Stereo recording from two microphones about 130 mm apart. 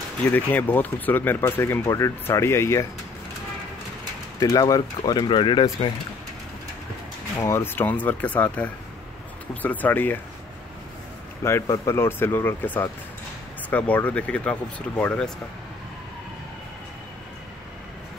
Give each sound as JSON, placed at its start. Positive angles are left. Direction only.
{"t": 0.3, "sound": "speech", "side_deg": 15}
{"t": 4.4, "sound": "speech", "side_deg": 25}
{"t": 7.3, "sound": "speech", "side_deg": 20}
{"t": 11.4, "sound": "speech", "side_deg": 25}